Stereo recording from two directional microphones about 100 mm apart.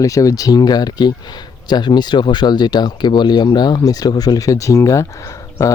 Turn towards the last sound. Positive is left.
turn(degrees=35)  # may be behind; listen again after turning